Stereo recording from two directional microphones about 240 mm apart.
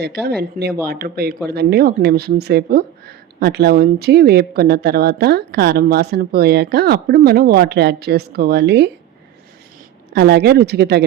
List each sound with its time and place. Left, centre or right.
0.0 s speech: right
10.1 s speech: right